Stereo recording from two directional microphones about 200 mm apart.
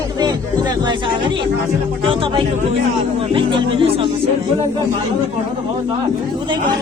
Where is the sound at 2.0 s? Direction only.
25° right (ahead or behind).